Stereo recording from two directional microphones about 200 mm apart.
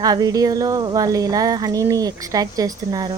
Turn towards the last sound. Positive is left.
turn(degrees=-20)  # may be behind; listen again after turning